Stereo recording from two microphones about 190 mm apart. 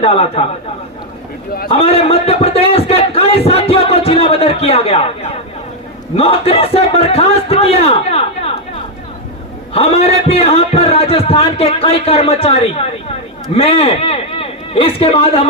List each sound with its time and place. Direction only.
0.0 s a man's voice: 30° left (ahead or behind)
1.6 s a sound: 30° left (ahead or behind)
6.1 s a man's voice: 30° left (ahead or behind)
9.7 s a man's voice: 30° left (ahead or behind)